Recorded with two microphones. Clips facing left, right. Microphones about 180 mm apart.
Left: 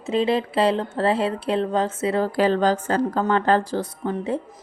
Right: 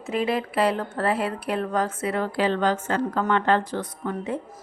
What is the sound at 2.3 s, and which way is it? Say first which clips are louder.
A woman's voice: left 2 dB; 40° left (ahead or behind).